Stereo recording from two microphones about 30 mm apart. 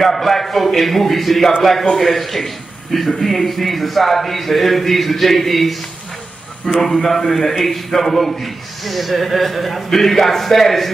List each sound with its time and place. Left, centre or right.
0.0 s a man's voice: centre